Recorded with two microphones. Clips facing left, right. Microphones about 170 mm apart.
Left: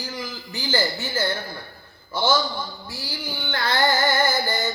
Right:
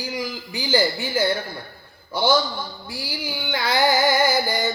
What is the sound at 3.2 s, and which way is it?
Music, 10° right (ahead or behind).